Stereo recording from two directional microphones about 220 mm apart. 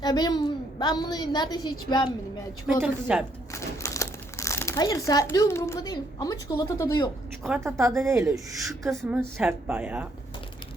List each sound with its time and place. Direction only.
0.0 s a woman's voice: 20° left (ahead or behind)
2.8 s a woman's voice: 5° right (ahead or behind)
3.5 s speech: 15° left (ahead or behind)
7.4 s a woman's voice: 10° right (ahead or behind)
8.8 s a woman's voice: centre (ahead or behind)